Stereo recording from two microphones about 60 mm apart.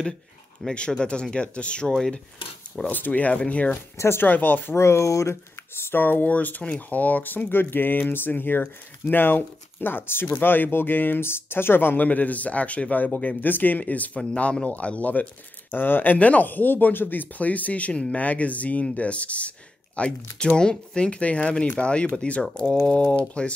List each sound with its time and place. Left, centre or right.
0.7 s speech: centre
1.9 s speech: centre
2.9 s speech: left
4.0 s speech: left
4.3 s speech: left
4.7 s speech: left
5.9 s speech: left; by 23.5 s centre